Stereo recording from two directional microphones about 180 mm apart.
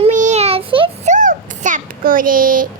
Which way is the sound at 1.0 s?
45° right (ahead or behind).